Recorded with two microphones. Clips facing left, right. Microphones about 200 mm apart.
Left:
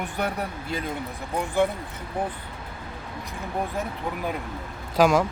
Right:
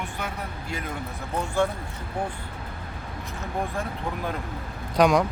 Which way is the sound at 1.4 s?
15° left (ahead or behind).